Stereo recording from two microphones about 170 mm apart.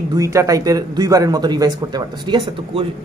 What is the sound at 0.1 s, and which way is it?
A man's voice, 20° right (ahead or behind).